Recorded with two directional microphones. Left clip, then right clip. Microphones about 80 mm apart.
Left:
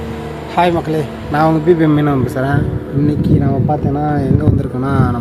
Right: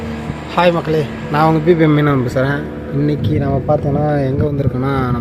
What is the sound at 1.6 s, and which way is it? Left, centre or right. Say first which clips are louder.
Speech: even; centre.